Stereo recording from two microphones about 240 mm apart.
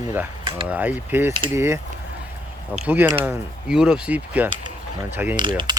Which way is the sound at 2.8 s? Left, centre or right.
Centre.